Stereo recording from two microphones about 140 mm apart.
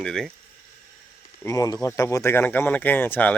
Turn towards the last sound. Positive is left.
turn(degrees=15)  # may be behind; listen again after turning